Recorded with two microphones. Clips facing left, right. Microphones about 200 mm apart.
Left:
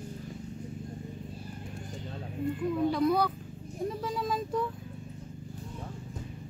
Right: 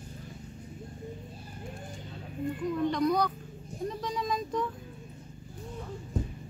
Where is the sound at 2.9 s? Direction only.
5° left (ahead or behind).